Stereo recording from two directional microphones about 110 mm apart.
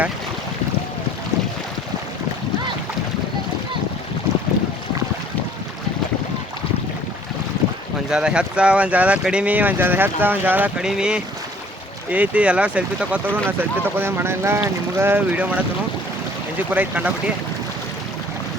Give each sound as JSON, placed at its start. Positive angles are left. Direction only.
{"t": 8.1, "sound": "speech", "side_deg": -10}
{"t": 16.7, "sound": "speech", "side_deg": -15}